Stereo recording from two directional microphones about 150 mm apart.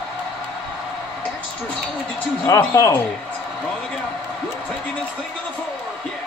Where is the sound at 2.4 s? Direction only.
20° left (ahead or behind).